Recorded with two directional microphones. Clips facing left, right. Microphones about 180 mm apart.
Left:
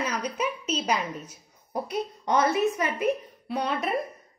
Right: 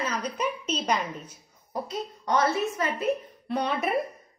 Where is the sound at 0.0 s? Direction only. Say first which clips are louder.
Even; 10° left (ahead or behind).